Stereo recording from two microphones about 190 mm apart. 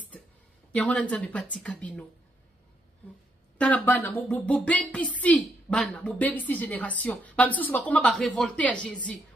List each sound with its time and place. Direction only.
0.7 s speech: 5° left (ahead or behind)
3.5 s speech: 5° left (ahead or behind)